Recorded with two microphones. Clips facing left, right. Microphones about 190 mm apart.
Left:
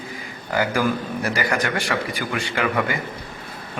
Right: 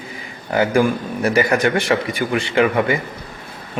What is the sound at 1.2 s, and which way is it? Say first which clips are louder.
Speech: right 8 dB; 25° right (ahead or behind).